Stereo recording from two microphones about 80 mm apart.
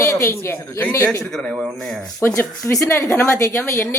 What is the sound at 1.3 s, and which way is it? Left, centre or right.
Speech, centre.